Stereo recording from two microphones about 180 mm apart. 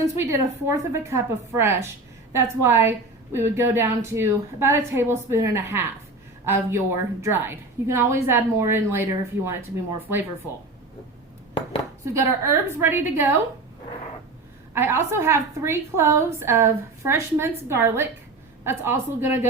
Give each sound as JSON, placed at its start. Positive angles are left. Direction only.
{"t": 0.0, "sound": "a woman's voice", "side_deg": -15}
{"t": 12.0, "sound": "a woman's voice", "side_deg": -15}
{"t": 14.7, "sound": "a woman's voice", "side_deg": -15}